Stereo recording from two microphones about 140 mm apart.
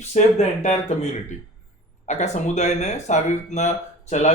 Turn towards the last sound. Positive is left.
turn(degrees=55)  # may be behind; listen again after turning